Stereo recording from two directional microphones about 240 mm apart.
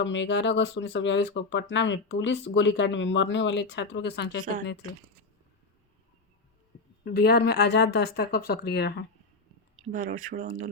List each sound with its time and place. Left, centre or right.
0.0 s speech: left
7.0 s speech: left
9.9 s speech: right